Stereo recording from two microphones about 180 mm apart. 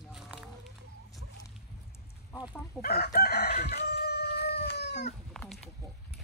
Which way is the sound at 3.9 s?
60° left (ahead or behind).